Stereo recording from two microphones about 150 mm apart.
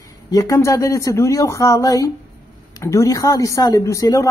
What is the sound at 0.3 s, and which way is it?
Speech, 25° left (ahead or behind).